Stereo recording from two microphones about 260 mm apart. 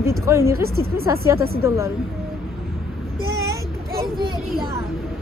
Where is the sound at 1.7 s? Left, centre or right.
Centre.